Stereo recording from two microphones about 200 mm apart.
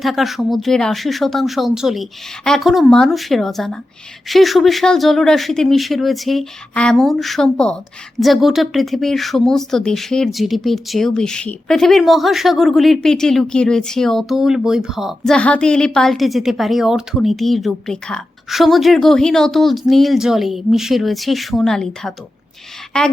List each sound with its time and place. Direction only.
0.0 s speech: centre (ahead or behind)